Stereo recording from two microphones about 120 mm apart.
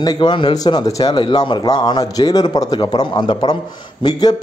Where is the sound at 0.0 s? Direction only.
40° left (ahead or behind).